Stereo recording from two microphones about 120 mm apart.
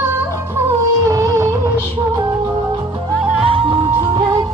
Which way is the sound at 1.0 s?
25° right (ahead or behind).